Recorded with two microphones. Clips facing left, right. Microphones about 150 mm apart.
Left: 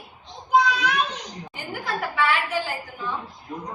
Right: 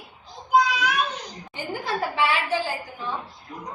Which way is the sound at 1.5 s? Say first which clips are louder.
Right 2 dB; 30° right (ahead or behind).